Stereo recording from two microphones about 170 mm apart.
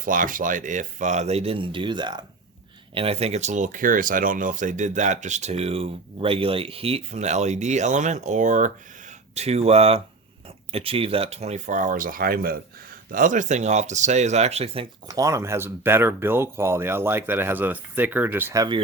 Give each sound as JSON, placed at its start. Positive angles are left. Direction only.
{"t": 0.0, "sound": "speech", "side_deg": -50}
{"t": 15.0, "sound": "speech", "side_deg": -20}